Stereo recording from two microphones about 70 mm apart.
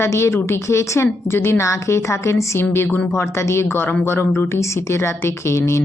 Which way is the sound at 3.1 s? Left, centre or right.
Left.